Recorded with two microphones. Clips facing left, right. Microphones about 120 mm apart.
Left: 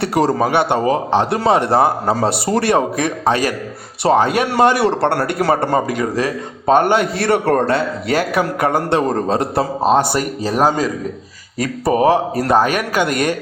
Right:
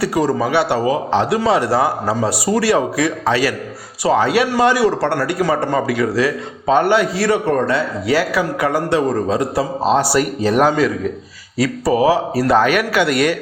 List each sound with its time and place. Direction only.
0.0 s a man's voice: 60° left (ahead or behind)
0.3 s a man's voice: 50° left (ahead or behind)
5.7 s a man's voice: 40° left (ahead or behind)
10.4 s speech: 40° left (ahead or behind)
11.5 s speech: 50° left (ahead or behind)